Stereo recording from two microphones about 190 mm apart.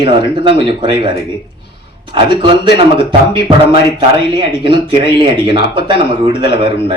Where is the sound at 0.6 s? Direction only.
25° right (ahead or behind).